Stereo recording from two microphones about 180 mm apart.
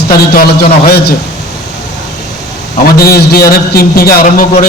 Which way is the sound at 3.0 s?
55° left (ahead or behind).